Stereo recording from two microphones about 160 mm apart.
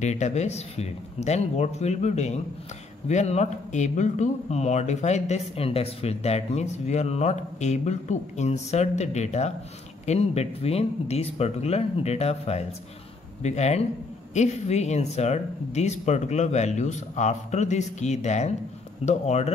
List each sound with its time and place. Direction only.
0.0 s speech: 45° left (ahead or behind)